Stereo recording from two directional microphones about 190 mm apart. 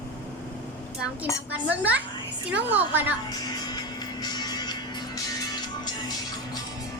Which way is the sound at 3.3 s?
20° left (ahead or behind).